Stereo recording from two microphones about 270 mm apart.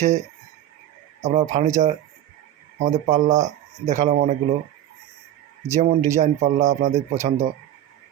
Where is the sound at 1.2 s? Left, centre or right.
Right.